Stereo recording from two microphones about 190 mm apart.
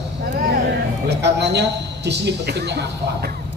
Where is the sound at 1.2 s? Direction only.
65° right (ahead or behind).